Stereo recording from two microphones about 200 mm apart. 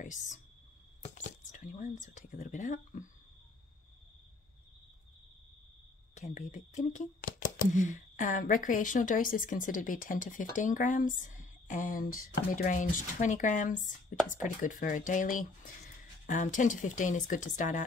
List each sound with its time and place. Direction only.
0.0 s speech: 35° left (ahead or behind)
6.1 s speech: 35° left (ahead or behind)